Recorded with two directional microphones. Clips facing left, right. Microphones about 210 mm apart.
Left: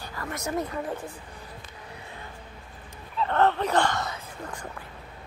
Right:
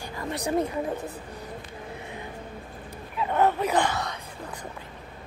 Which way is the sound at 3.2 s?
10° right (ahead or behind).